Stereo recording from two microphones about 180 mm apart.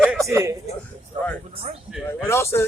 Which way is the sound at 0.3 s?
15° right (ahead or behind).